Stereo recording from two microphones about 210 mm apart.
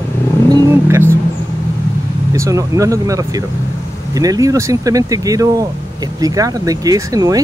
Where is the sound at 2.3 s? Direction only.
15° right (ahead or behind).